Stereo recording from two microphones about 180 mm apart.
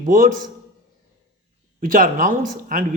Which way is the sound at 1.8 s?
50° right (ahead or behind).